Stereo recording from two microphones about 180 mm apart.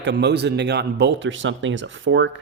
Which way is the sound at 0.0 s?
70° right (ahead or behind).